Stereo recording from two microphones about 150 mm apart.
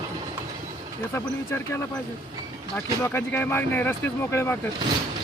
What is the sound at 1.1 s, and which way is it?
Speech, 15° left (ahead or behind).